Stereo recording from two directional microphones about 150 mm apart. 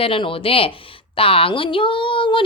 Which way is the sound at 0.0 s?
35° left (ahead or behind).